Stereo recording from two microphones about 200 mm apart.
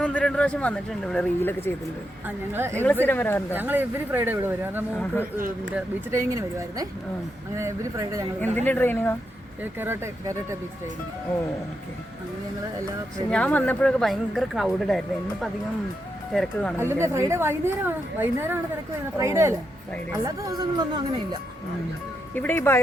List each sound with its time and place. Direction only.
0.0 s speech: 5° left (ahead or behind)
2.2 s a woman's voice: 10° right (ahead or behind)
2.8 s speech: 10° left (ahead or behind)
3.5 s a woman's voice: 10° right (ahead or behind)
8.6 s speech: 10° left (ahead or behind)
9.8 s a woman's voice: 10° right (ahead or behind)
13.3 s speech: 5° left (ahead or behind)
16.7 s a woman's voice: 10° right (ahead or behind)
22.4 s speech: 10° left (ahead or behind)